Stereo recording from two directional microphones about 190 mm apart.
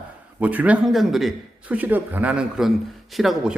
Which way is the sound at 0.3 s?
10° right (ahead or behind).